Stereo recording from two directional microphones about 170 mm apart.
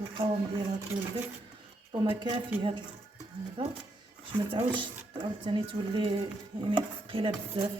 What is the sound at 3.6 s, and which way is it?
Speech, 30° right (ahead or behind).